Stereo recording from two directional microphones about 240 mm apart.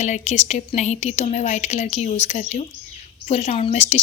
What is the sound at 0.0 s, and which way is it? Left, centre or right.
A woman's voice, left.